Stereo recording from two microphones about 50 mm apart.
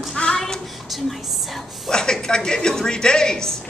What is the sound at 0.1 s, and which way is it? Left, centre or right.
Child singing, centre.